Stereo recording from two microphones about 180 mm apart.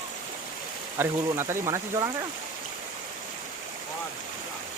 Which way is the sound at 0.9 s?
15° right (ahead or behind).